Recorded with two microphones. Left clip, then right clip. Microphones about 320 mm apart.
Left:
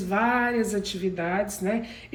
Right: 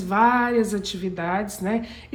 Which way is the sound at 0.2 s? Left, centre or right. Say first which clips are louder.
Right 5 dB; right.